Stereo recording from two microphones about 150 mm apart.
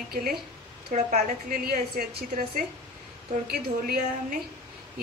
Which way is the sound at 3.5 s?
90° right.